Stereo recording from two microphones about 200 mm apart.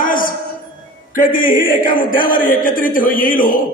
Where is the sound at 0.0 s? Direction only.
45° left (ahead or behind).